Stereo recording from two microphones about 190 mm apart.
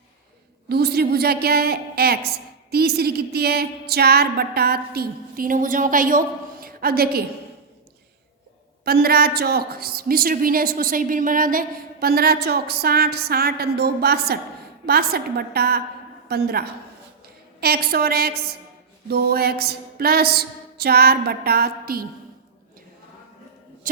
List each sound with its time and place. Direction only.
0.7 s a woman's voice: 55° right (ahead or behind)
8.8 s a woman's voice: 55° right (ahead or behind)
23.9 s a sound: 45° right (ahead or behind)